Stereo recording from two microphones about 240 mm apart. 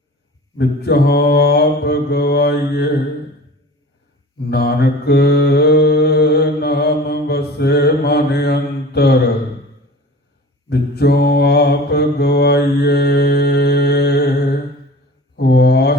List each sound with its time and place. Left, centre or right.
0.5 s mantra: left
4.5 s mantra: left
10.7 s mantra: left
15.4 s mantra: left